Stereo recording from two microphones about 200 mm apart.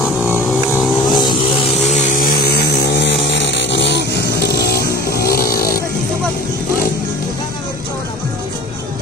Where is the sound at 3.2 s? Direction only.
60° left (ahead or behind).